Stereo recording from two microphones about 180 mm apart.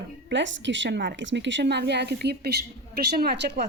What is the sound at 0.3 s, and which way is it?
A woman's voice, 85° right.